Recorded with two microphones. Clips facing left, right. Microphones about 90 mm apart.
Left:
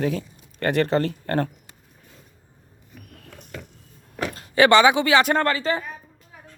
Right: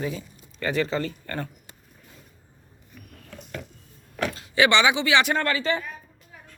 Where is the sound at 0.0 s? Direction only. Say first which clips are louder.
Left 6 dB; 70° left (ahead or behind).